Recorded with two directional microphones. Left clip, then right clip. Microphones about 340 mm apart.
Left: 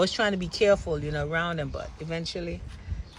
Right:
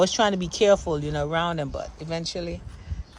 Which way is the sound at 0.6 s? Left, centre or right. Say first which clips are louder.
Right 3 dB; centre.